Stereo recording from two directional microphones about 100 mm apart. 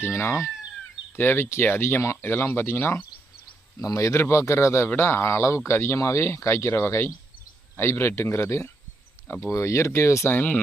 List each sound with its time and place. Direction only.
0.0 s speech: 25° left (ahead or behind)